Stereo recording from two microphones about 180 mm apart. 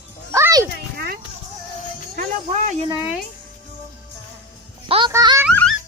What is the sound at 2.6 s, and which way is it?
Speech, 35° right (ahead or behind).